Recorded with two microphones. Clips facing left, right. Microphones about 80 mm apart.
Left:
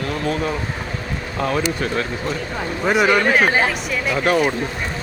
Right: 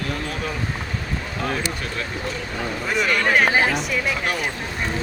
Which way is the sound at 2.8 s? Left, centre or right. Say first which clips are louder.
Left 7 dB; left.